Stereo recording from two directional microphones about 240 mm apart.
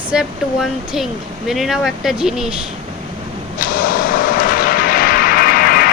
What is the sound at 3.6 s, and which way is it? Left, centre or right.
Vehicle, left.